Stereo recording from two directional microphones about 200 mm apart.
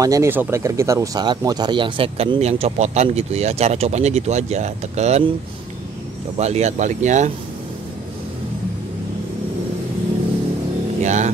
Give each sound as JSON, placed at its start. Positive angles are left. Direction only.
{"t": 0.0, "sound": "speech", "side_deg": -15}
{"t": 6.3, "sound": "speech", "side_deg": -35}
{"t": 11.0, "sound": "vehicle", "side_deg": -35}